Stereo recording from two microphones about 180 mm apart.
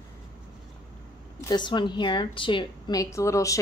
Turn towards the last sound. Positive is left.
turn(degrees=15)  # may be behind; listen again after turning